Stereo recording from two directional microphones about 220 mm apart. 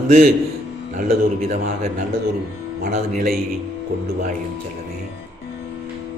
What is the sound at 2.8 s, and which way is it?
Speech, 45° right (ahead or behind).